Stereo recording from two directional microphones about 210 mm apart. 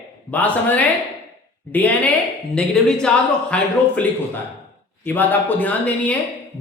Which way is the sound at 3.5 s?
5° left (ahead or behind).